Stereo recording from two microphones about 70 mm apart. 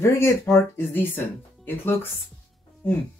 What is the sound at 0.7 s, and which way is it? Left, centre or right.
Speech, left.